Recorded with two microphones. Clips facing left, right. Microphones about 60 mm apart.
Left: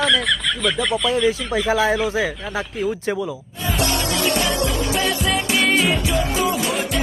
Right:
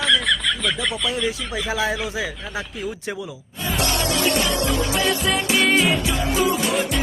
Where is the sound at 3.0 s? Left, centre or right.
Left.